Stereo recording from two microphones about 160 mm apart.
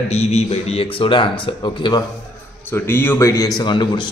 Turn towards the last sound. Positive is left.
turn(degrees=30)  # may be behind; listen again after turning